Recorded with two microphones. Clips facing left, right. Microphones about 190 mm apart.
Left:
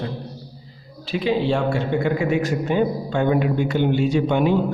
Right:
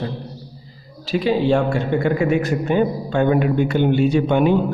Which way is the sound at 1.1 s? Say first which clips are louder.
Right 3 dB; 45° right (ahead or behind).